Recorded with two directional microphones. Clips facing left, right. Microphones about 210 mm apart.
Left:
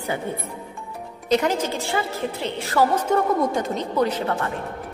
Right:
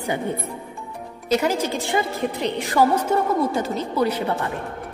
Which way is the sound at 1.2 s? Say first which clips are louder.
Even; 10° right (ahead or behind).